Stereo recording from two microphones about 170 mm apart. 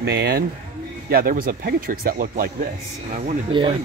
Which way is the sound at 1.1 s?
60° right (ahead or behind).